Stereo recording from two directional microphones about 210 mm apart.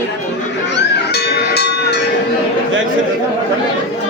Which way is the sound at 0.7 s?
50° left (ahead or behind).